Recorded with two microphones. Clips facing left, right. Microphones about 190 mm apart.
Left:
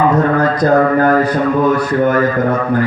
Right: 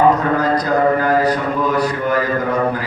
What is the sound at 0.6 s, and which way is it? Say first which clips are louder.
A man's voice: left 5 dB; 50° left (ahead or behind).